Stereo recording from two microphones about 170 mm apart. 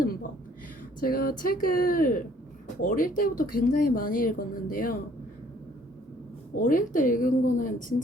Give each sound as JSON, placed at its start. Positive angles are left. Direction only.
{"t": 0.0, "sound": "a sound", "side_deg": 55}
{"t": 1.0, "sound": "speech", "side_deg": 60}
{"t": 6.6, "sound": "speech", "side_deg": 55}